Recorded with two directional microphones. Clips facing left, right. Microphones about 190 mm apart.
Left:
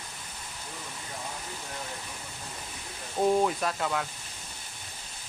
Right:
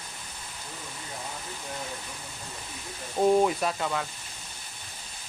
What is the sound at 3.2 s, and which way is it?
Speech, 10° right (ahead or behind).